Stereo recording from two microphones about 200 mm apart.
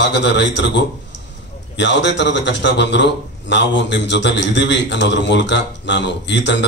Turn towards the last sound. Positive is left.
turn(degrees=60)  # may be behind; listen again after turning